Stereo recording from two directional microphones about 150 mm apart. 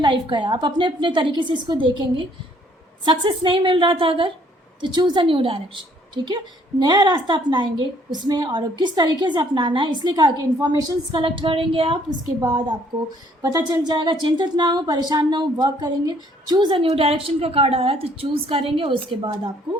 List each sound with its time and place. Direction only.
0.0 s a woman's voice: 30° right (ahead or behind)
12.4 s a woman's voice: 20° right (ahead or behind)
12.9 s speech: 10° right (ahead or behind)
13.4 s a woman's voice: 25° right (ahead or behind)